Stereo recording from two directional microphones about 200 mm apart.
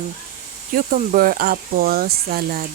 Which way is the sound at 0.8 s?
45° right (ahead or behind).